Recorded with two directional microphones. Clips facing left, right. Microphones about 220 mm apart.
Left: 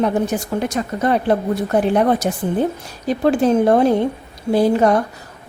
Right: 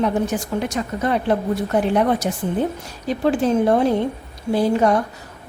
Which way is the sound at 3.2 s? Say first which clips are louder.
Left 3 dB; 50° left (ahead or behind).